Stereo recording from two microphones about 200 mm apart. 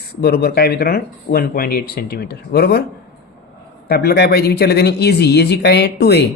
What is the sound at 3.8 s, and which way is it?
Speech, 50° left (ahead or behind).